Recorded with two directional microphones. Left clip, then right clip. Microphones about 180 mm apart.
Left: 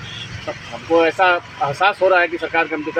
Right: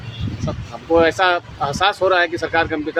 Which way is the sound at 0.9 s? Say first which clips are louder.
Even; 15° right (ahead or behind).